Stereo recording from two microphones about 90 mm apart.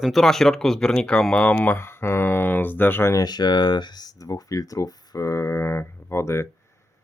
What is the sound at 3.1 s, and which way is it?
Speech, 50° left (ahead or behind).